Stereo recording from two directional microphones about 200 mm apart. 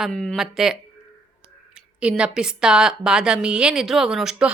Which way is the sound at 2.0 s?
5° right (ahead or behind).